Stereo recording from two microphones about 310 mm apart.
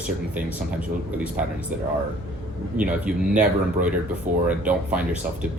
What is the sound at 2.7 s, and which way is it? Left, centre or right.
Speech, centre.